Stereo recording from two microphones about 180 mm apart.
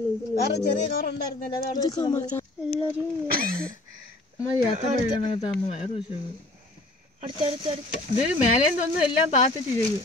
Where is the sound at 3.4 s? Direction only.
55° right (ahead or behind).